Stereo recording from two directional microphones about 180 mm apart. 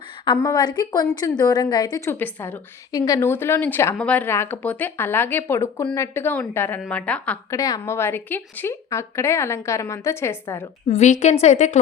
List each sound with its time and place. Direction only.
0.3 s a woman's voice: 20° left (ahead or behind)
7.5 s a woman's voice: 20° left (ahead or behind)
10.8 s a woman's voice: 40° left (ahead or behind)